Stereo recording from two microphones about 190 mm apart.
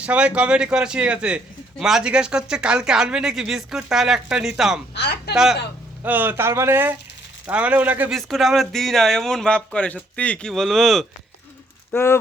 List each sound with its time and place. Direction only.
0.0 s speech: 5° right (ahead or behind)
4.9 s speech: 60° left (ahead or behind)
5.3 s speech: 5° right (ahead or behind)
11.9 s speech: 10° left (ahead or behind)